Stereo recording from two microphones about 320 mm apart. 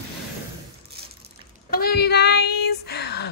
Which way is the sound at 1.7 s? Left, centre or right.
Left.